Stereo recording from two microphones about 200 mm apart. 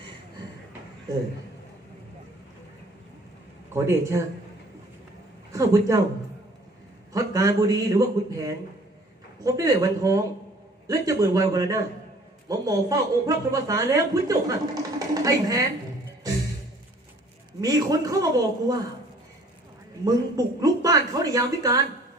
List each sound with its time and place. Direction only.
3.7 s a woman's voice: 15° right (ahead or behind)
5.5 s a woman's voice: 15° right (ahead or behind)
7.1 s a man's voice: 20° right (ahead or behind)
17.6 s a man's voice: 20° right (ahead or behind)
20.1 s a woman's voice: 15° right (ahead or behind)